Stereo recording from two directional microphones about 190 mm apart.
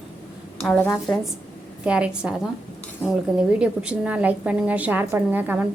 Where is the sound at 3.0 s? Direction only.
10° left (ahead or behind).